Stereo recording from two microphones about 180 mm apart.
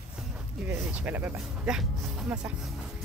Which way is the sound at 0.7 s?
10° right (ahead or behind).